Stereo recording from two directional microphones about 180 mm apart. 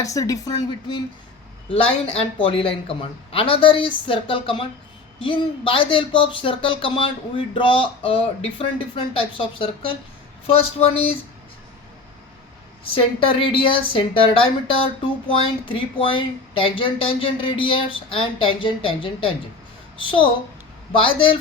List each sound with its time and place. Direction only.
0.0 s a woman's voice: 20° left (ahead or behind)
12.9 s a woman's voice: 30° left (ahead or behind)